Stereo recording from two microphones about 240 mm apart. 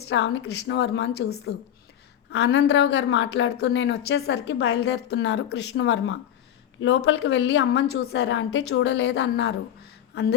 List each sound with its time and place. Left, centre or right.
0.1 s a woman's voice: left